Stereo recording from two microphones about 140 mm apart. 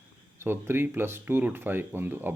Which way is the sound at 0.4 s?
15° right (ahead or behind).